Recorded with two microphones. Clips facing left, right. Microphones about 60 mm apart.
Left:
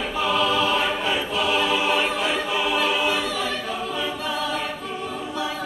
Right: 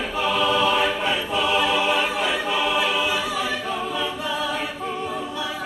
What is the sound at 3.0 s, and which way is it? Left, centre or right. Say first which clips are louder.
Choir: even; centre.